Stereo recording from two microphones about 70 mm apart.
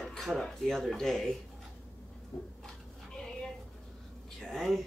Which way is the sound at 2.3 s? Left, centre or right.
Left.